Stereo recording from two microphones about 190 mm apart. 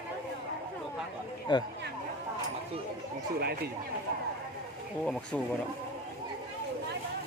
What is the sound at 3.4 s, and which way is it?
Speech, 55° right (ahead or behind).